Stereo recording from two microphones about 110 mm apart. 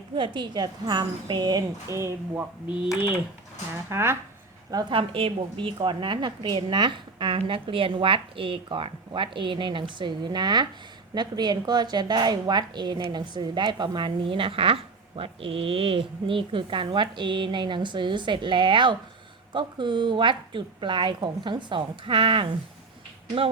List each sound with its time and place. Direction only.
0.2 s a woman's voice: 45° right (ahead or behind); by 2.1 s 25° right (ahead or behind)
3.8 s speech: 20° right (ahead or behind)
4.7 s a woman's voice: 35° right (ahead or behind)
4.9 s a woman's voice: 55° right (ahead or behind)